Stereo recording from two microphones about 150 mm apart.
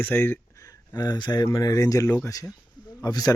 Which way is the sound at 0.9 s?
30° left (ahead or behind).